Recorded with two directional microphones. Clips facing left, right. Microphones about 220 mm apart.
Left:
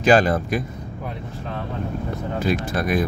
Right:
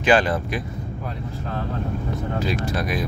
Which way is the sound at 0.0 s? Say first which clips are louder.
Left 2 dB; 45° left (ahead or behind).